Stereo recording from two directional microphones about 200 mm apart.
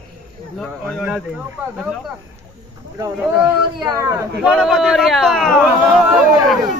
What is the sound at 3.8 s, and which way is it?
Speech, 15° right (ahead or behind).